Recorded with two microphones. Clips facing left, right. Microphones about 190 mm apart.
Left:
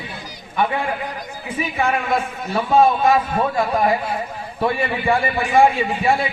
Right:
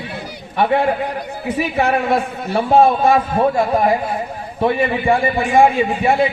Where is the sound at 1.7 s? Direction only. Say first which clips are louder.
Right 3 dB; 35° right (ahead or behind).